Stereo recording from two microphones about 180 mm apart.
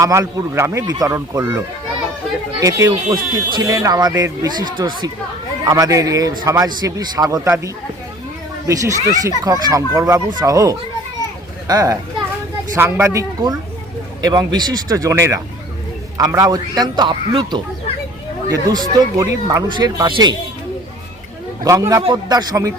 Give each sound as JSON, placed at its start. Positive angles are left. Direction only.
{"t": 0.0, "sound": "speech", "side_deg": -15}
{"t": 21.6, "sound": "speech", "side_deg": -20}